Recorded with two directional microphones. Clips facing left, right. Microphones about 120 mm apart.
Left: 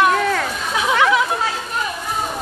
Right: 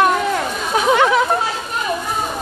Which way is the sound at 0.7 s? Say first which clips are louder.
Right 3 dB; 35° right (ahead or behind).